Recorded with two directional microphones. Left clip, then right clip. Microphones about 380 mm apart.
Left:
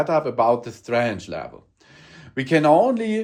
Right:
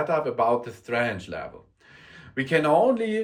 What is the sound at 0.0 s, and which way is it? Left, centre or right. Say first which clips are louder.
Speech: left 4 dB; centre.